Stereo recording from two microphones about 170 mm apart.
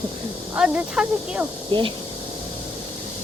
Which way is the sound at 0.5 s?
5° right (ahead or behind).